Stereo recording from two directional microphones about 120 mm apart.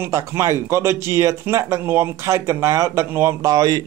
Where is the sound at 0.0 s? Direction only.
25° right (ahead or behind).